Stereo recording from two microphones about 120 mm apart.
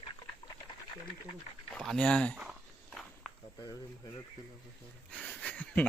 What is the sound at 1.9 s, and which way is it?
Speech, 10° left (ahead or behind).